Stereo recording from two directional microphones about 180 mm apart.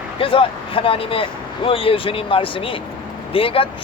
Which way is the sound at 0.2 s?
30° left (ahead or behind).